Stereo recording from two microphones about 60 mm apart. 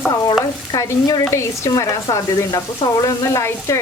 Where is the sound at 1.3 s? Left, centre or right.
Left.